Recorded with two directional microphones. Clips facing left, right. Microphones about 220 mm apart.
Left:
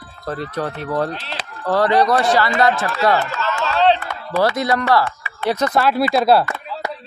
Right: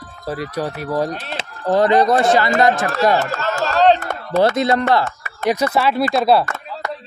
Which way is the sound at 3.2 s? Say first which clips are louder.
Right 2 dB; 45° right (ahead or behind).